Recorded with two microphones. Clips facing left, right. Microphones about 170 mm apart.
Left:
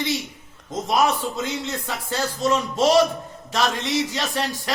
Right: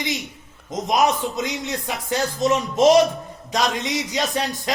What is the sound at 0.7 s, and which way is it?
Speech, 15° right (ahead or behind).